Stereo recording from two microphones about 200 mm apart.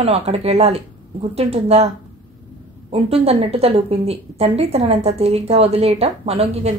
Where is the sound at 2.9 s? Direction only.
30° right (ahead or behind).